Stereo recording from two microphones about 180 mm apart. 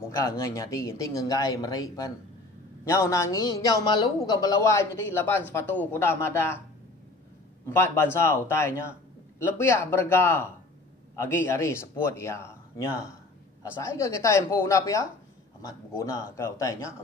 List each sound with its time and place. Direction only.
0.0 s speech: 15° left (ahead or behind)
7.6 s speech: 15° left (ahead or behind)